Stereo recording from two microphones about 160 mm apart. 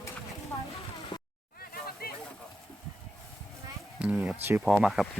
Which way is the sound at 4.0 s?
5° right (ahead or behind).